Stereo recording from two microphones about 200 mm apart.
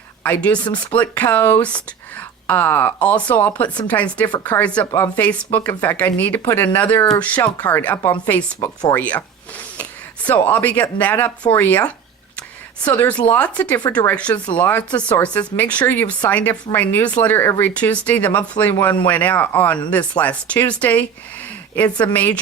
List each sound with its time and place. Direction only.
0.2 s speech: 10° left (ahead or behind)
10.2 s speech: 10° left (ahead or behind)
13.8 s speech: 20° left (ahead or behind)
14.1 s speech: 5° left (ahead or behind)
22.0 s speech: 10° left (ahead or behind)